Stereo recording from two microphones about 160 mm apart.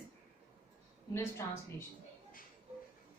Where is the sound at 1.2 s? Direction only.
15° left (ahead or behind).